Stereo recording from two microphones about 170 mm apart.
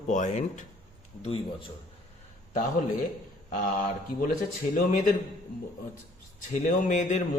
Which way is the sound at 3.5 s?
50° left (ahead or behind).